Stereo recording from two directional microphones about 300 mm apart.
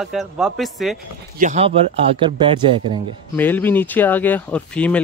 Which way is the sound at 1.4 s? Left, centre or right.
Right.